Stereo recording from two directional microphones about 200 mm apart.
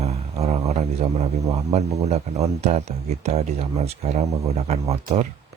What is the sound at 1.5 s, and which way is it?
Speech, 30° right (ahead or behind).